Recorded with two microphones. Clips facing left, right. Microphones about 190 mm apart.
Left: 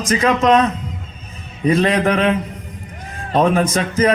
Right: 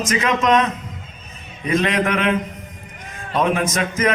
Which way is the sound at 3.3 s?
35° left (ahead or behind).